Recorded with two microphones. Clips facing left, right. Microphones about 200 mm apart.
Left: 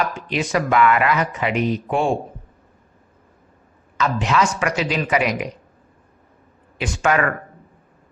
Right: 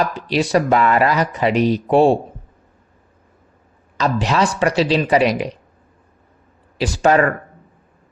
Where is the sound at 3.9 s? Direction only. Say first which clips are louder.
Right 2 dB; 35° right (ahead or behind).